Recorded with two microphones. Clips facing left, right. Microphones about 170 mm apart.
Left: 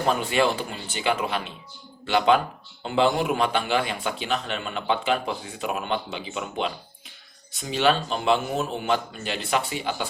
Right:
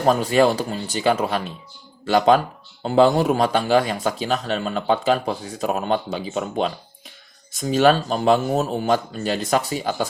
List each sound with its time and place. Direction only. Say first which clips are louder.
0.0 s speech: right 6 dB; 40° right (ahead or behind)